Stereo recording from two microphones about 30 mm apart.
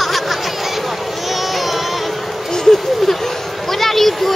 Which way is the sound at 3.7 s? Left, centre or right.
Centre.